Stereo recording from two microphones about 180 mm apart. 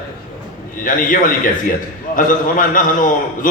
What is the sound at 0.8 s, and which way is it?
A man's voice, 50° left (ahead or behind).